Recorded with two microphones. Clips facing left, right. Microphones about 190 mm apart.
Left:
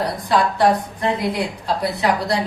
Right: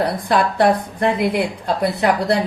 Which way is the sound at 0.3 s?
60° right (ahead or behind).